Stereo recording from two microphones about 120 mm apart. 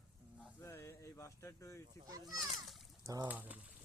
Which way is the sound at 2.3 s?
Centre (ahead or behind).